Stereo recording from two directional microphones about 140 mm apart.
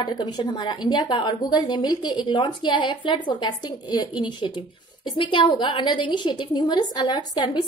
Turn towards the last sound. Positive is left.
turn(degrees=30)  # may be behind; listen again after turning